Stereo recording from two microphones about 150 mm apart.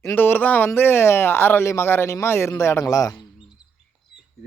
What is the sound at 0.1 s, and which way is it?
Speech, 15° left (ahead or behind).